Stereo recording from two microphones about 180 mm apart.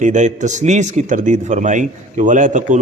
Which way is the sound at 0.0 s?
40° right (ahead or behind).